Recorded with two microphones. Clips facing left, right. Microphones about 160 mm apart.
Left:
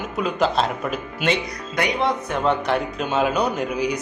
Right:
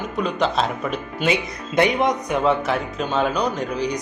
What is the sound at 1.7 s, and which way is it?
Speech, 20° right (ahead or behind).